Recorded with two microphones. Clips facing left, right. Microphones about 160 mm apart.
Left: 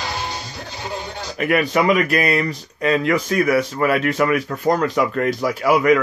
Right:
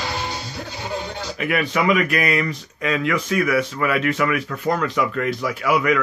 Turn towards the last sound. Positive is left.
turn(degrees=40)  # may be behind; listen again after turning